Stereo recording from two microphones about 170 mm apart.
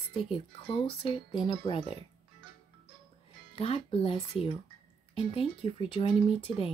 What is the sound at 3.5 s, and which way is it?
Speech, 35° left (ahead or behind).